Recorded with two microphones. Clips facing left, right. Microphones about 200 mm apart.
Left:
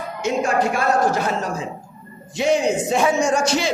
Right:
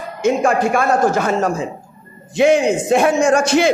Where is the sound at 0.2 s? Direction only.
50° right (ahead or behind).